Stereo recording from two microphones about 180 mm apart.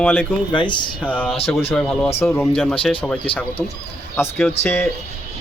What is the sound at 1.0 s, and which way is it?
Speech, 10° left (ahead or behind).